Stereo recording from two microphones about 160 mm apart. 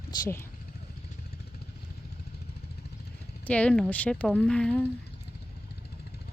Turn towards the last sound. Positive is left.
turn(degrees=5)  # may be behind; listen again after turning